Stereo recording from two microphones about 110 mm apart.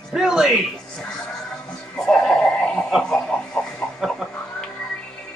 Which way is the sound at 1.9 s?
5° left (ahead or behind).